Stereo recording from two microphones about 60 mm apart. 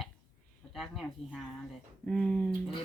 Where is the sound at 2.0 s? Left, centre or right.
Centre.